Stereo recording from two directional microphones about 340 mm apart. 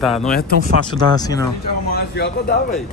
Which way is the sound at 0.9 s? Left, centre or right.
Centre.